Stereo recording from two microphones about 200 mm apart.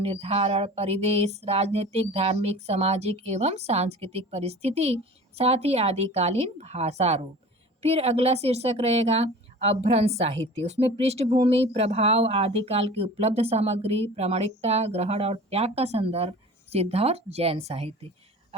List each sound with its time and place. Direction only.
0.0 s a woman's voice: 30° right (ahead or behind)